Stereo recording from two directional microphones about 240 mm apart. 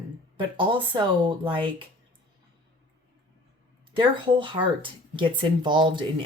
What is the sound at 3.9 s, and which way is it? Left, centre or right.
Speech, right.